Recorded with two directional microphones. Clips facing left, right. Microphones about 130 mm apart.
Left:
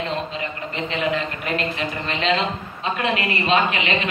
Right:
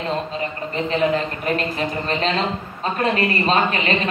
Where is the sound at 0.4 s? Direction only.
40° right (ahead or behind).